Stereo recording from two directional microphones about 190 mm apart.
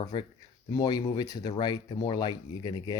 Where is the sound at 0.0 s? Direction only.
25° left (ahead or behind).